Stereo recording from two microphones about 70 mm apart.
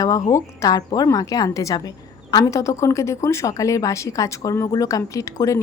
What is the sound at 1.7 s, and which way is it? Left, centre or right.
A woman's voice, left.